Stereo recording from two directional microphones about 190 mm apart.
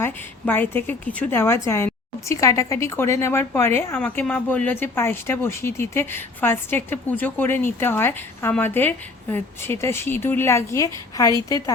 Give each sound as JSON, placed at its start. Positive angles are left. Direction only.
{"t": 0.0, "sound": "a woman's voice", "side_deg": 10}